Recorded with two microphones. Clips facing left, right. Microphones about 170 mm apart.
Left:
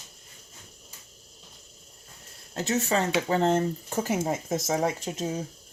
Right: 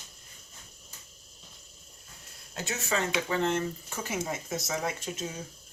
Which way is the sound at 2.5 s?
35° left (ahead or behind).